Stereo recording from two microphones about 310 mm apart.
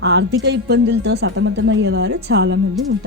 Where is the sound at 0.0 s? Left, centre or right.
Right.